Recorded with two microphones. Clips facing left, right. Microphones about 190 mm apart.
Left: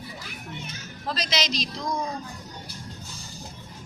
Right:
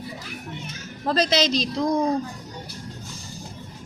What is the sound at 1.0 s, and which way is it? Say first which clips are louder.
Speech: right 10 dB; 50° right (ahead or behind).